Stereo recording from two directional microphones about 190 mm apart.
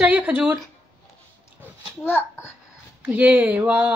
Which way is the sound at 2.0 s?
10° left (ahead or behind).